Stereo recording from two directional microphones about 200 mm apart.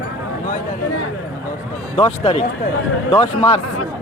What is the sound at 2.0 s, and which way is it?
Speech, 25° left (ahead or behind).